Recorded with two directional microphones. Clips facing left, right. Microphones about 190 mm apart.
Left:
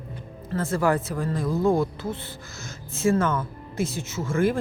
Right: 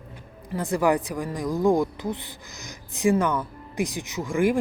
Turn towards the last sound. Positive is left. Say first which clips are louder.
# right 1 dB
turn(degrees=-15)  # may be behind; listen again after turning